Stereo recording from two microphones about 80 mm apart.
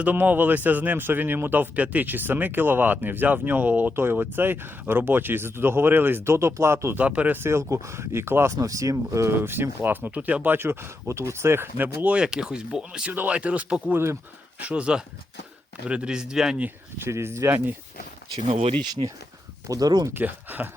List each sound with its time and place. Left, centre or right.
0.0 s speech: right
7.0 s speech: centre
8.5 s speech: right
9.3 s speech: right
12.0 s speech: centre
13.9 s speech: right
14.6 s speech: centre
17.0 s speech: right
19.6 s speech: right
20.1 s speech: right